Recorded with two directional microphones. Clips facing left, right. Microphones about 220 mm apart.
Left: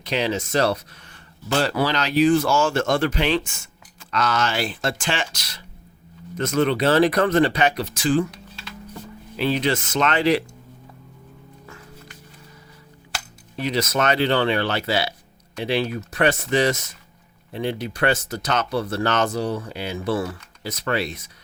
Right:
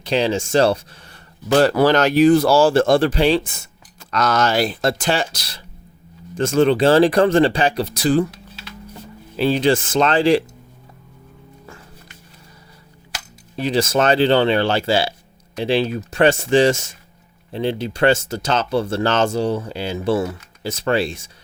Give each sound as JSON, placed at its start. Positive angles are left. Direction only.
{"t": 0.0, "sound": "speech", "side_deg": -30}
{"t": 9.4, "sound": "speech", "side_deg": -30}
{"t": 13.6, "sound": "speech", "side_deg": -30}